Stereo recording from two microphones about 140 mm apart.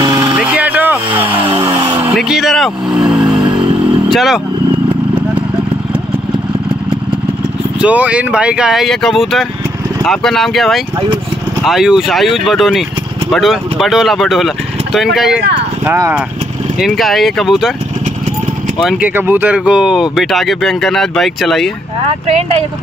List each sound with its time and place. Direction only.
0.4 s a sound: 10° right (ahead or behind)
1.6 s a sound: 30° right (ahead or behind)
2.1 s vehicle: centre (ahead or behind)
4.1 s speech: centre (ahead or behind)
7.8 s speech: 10° right (ahead or behind)
15.8 s speech: 15° right (ahead or behind)
16.8 s speech: centre (ahead or behind)
18.8 s speech: 5° right (ahead or behind)